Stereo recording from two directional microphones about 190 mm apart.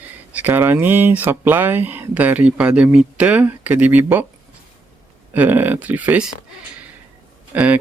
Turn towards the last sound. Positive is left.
turn(degrees=-10)  # may be behind; listen again after turning